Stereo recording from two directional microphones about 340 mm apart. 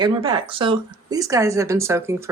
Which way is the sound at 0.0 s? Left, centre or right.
Centre.